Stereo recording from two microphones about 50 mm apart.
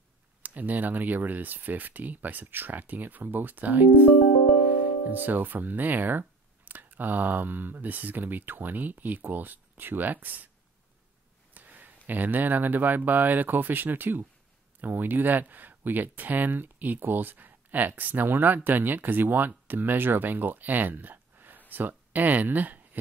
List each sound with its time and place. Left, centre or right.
0.4 s speech: right
11.5 s speech: right